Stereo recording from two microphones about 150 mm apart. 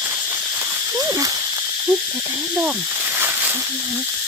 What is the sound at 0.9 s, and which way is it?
Speech, 25° right (ahead or behind).